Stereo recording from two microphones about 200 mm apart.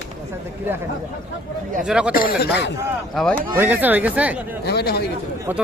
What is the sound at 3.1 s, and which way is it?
Speech, 5° left (ahead or behind).